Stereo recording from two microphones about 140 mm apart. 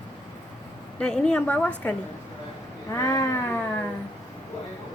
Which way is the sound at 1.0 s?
5° left (ahead or behind).